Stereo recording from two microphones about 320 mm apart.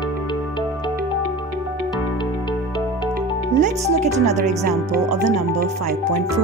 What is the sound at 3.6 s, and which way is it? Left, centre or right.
Speech, right.